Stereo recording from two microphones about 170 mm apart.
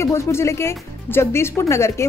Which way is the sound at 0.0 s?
15° left (ahead or behind).